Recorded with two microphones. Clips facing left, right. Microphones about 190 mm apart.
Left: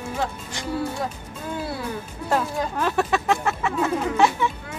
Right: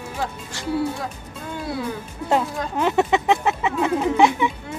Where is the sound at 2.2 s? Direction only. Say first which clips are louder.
Right 2 dB; 20° right (ahead or behind).